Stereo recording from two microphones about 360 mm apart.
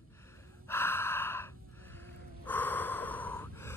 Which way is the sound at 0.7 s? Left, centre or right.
Centre.